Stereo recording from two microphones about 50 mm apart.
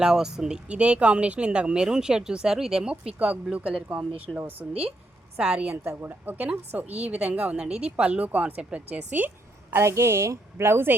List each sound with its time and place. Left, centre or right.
0.0 s speech: centre
4.3 s speech: centre
6.0 s speech: right
9.6 s a woman's voice: right